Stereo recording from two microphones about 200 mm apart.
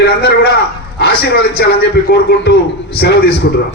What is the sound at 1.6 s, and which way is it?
A man's voice, 55° left (ahead or behind).